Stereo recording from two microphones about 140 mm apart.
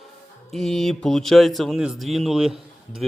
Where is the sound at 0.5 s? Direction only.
Centre (ahead or behind).